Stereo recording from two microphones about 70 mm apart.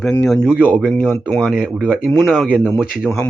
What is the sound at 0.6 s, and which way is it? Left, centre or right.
Speech, centre.